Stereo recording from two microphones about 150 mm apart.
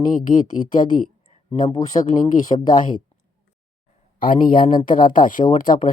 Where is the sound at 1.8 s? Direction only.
25° left (ahead or behind).